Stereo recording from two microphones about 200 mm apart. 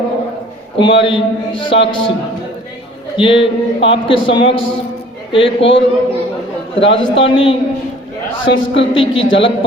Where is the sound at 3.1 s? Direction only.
25° left (ahead or behind).